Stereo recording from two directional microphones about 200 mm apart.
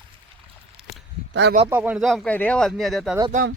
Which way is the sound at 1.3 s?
60° right (ahead or behind).